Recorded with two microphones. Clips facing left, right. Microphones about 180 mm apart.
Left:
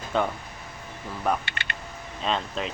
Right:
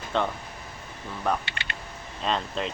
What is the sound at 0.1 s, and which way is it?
Speech, 5° left (ahead or behind).